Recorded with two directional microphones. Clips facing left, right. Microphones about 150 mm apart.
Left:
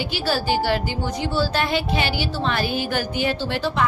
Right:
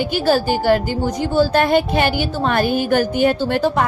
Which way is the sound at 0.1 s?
45° right (ahead or behind).